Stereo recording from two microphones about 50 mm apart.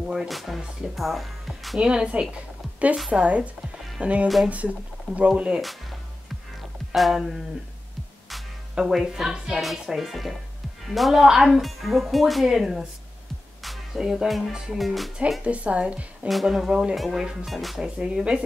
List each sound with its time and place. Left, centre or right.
0.3 s a woman's voice: centre
1.8 s speech: centre
2.3 s a sound: right
3.1 s speech: right
5.6 s a woman's voice: centre
8.7 s a woman's voice: centre
13.7 s music: centre
14.8 s a woman's voice: centre
15.4 s speech: right
16.9 s a woman's voice: centre